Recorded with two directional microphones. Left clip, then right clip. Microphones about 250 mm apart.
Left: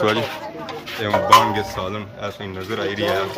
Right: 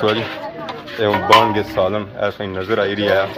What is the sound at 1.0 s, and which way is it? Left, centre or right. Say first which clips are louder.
Speech: right 2 dB; left.